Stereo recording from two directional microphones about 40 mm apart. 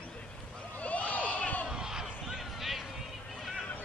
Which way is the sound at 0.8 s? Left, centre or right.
Left.